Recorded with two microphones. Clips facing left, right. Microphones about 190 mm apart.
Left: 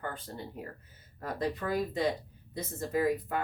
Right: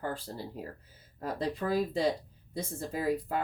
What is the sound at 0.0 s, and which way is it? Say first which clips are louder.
Speech: right 3 dB; 30° right (ahead or behind).